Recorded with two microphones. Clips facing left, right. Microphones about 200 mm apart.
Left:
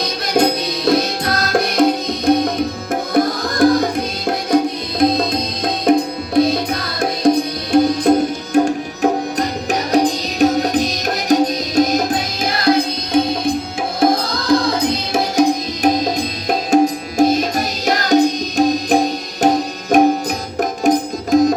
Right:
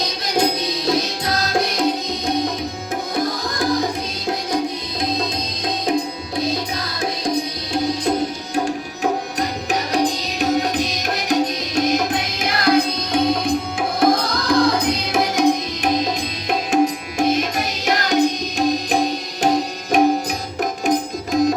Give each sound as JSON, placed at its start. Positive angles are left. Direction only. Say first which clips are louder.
{"t": 0.0, "sound": "music", "louder": "left 4 dB", "side_deg": 55}
{"t": 7.7, "sound": "music", "louder": "left 8 dB", "side_deg": 55}
{"t": 8.5, "sound": "music", "louder": "left 8 dB", "side_deg": 40}
{"t": 14.0, "sound": "music", "louder": "left 2 dB", "side_deg": 25}